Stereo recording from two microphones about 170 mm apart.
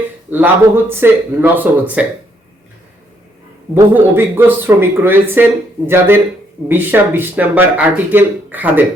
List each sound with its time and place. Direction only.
0.3 s speech: 10° right (ahead or behind)
3.8 s speech: 10° right (ahead or behind)